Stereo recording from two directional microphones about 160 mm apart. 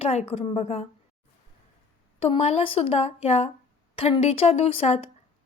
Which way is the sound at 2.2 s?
40° left (ahead or behind).